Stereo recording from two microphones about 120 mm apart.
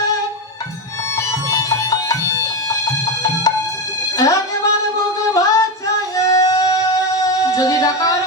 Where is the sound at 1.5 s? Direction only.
30° left (ahead or behind).